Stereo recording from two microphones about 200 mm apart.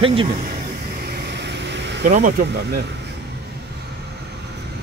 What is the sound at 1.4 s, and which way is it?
Vehicle, 60° right (ahead or behind).